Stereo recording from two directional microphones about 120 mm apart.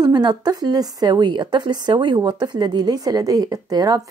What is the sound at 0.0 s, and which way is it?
Speech, 35° right (ahead or behind).